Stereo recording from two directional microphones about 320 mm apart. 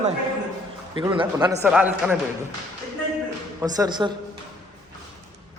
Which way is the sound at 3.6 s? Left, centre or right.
Centre.